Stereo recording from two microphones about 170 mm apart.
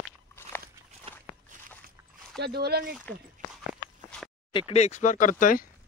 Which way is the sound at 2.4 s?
70° right (ahead or behind).